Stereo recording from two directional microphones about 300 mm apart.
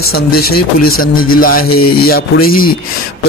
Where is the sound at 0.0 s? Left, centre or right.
Left.